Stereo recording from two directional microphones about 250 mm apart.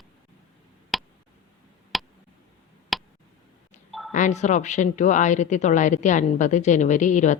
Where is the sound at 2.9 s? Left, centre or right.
Centre.